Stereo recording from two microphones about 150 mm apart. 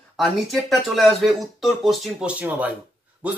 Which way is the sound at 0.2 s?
Centre (ahead or behind).